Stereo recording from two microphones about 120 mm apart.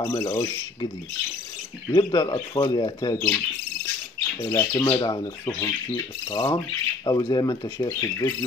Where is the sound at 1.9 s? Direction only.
35° left (ahead or behind).